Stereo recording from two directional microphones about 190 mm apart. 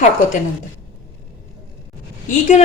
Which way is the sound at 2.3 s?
40° left (ahead or behind).